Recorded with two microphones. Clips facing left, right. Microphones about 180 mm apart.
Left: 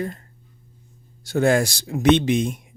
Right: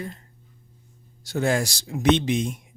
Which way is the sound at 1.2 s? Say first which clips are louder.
Left 5 dB; 55° left (ahead or behind).